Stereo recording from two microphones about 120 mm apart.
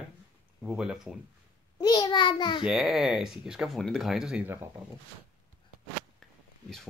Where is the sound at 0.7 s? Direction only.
5° right (ahead or behind).